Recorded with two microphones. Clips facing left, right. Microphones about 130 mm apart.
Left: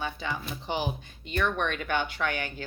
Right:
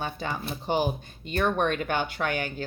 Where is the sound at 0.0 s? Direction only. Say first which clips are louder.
Right 2 dB; 45° right (ahead or behind).